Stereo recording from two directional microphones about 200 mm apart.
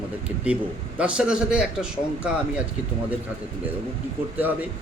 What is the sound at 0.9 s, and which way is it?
A man's voice, 5° right (ahead or behind).